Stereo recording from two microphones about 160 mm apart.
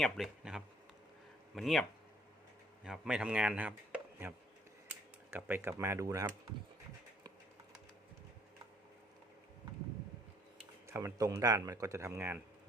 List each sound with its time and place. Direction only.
0.0 s speech: centre (ahead or behind); by 6.2 s 20° right (ahead or behind)
10.8 s speech: 20° right (ahead or behind)